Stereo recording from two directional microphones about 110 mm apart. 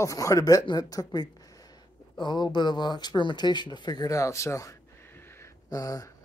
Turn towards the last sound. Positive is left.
turn(degrees=30)  # may be behind; listen again after turning